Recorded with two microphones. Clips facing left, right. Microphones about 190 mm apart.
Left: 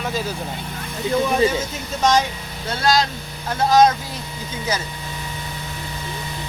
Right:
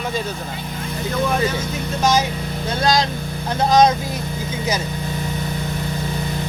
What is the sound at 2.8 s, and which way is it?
Speech, 20° right (ahead or behind).